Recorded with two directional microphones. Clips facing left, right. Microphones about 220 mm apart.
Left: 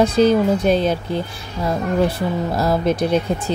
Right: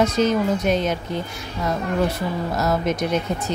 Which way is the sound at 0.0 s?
30° left (ahead or behind).